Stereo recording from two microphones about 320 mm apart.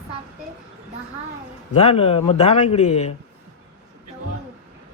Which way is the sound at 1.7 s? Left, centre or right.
Centre.